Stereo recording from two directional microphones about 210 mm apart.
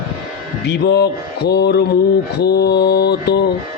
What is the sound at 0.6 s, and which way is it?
Mantra, 55° left (ahead or behind).